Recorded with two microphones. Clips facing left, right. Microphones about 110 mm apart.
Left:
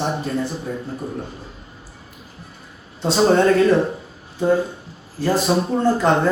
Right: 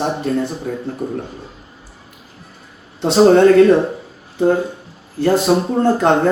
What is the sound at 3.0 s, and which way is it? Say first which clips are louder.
Speech: right 6 dB; 55° right (ahead or behind).